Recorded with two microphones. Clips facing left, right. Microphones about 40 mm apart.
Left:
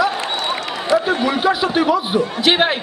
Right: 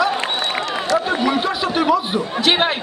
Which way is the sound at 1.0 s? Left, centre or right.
Centre.